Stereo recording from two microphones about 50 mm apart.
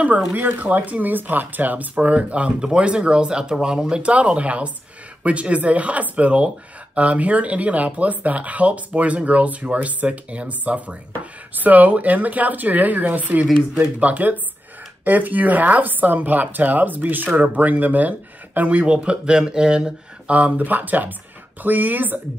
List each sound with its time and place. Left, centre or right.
0.3 s speech: right; by 20.3 s centre
20.3 s speech: right